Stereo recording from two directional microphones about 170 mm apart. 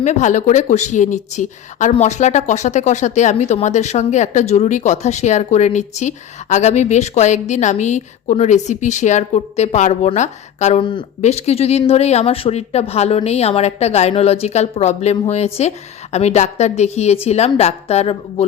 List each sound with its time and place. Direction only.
0.0 s speech: 45° left (ahead or behind)